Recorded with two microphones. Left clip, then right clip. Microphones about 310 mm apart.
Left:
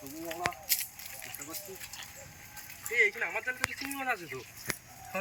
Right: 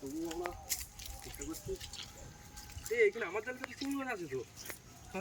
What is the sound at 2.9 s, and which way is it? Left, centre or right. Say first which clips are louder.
Speech: left 3 dB; centre.